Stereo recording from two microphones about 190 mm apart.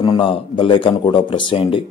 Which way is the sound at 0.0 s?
25° left (ahead or behind).